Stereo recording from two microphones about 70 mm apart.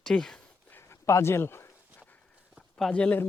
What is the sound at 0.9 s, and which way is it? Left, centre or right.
Speech, left.